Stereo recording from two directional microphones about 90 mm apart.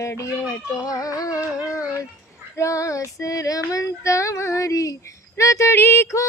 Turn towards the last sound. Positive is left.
turn(degrees=30)  # may be behind; listen again after turning